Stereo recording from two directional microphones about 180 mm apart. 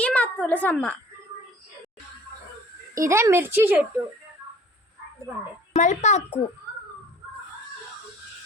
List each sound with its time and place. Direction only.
0.0 s a woman's voice: 5° left (ahead or behind)
2.9 s speech: 15° right (ahead or behind)
5.7 s speech: 40° left (ahead or behind)